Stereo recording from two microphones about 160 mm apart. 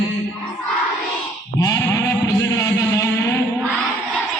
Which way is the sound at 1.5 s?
20° left (ahead or behind).